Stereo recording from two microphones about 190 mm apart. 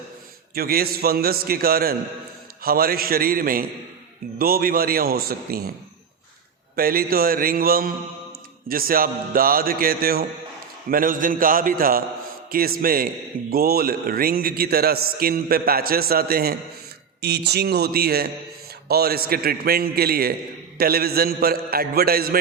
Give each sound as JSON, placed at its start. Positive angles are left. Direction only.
{"t": 0.5, "sound": "a man's voice", "side_deg": -55}
{"t": 6.7, "sound": "a man's voice", "side_deg": -50}